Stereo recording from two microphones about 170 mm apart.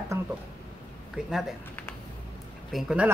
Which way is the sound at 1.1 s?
5° right (ahead or behind).